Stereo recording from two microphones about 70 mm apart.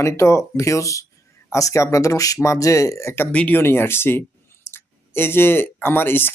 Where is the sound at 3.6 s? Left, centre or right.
Left.